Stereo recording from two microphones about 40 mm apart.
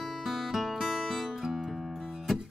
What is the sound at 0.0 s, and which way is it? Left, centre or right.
Music, centre.